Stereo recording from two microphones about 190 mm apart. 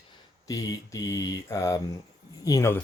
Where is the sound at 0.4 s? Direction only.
20° left (ahead or behind).